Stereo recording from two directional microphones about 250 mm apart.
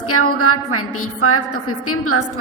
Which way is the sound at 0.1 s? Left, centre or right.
Left.